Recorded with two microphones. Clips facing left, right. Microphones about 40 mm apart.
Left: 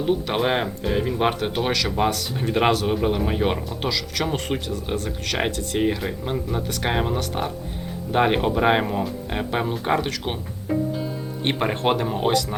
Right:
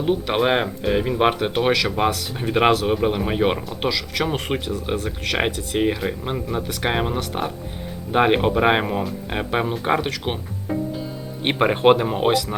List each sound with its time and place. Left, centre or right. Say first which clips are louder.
0.0 s speech: right 2 dB; centre
11.4 s speech: right 6 dB; centre
12.3 s speech: right 1 dB; centre